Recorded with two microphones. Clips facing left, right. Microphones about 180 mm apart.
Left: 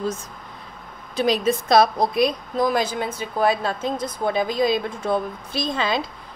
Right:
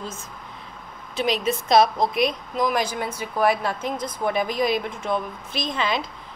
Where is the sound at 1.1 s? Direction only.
35° left (ahead or behind).